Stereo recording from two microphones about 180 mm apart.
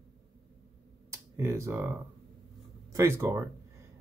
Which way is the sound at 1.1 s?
15° right (ahead or behind).